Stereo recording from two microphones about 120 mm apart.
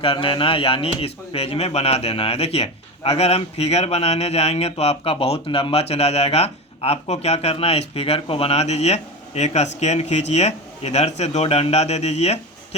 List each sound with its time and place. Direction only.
0.0 s speech: 45° left (ahead or behind); by 12.4 s 65° left (ahead or behind)